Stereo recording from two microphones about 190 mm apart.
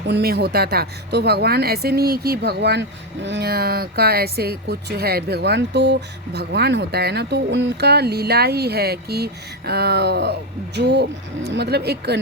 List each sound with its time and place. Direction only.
0.1 s speech: 55° right (ahead or behind)